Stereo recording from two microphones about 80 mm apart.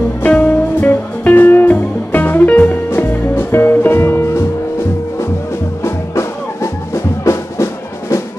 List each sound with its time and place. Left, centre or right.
0.2 s music: centre
5.9 s music: left